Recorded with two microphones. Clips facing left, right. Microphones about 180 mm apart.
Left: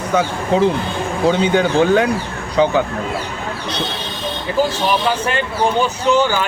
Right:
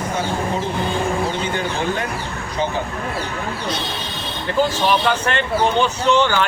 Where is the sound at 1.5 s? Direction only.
85° left.